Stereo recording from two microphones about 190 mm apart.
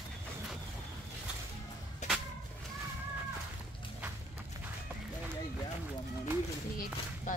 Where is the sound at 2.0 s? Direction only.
40° left (ahead or behind).